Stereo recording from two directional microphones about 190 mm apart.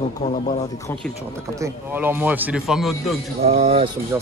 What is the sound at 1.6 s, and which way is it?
Speech, 10° right (ahead or behind).